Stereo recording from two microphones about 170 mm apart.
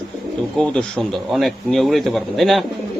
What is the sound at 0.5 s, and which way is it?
Speech, 5° left (ahead or behind).